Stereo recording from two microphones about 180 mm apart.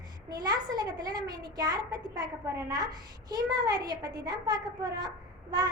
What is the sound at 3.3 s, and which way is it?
A child's voice, 20° right (ahead or behind).